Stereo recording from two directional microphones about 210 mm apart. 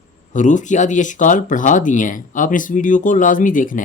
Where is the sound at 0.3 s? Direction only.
35° left (ahead or behind).